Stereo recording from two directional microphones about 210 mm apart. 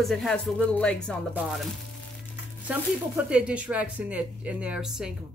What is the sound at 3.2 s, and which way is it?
A woman's voice, 5° right (ahead or behind).